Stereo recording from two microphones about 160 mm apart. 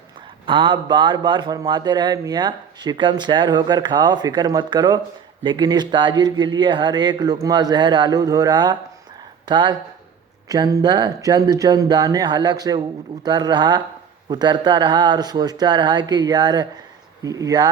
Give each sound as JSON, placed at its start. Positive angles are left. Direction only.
{"t": 0.4, "sound": "a man's voice", "side_deg": -30}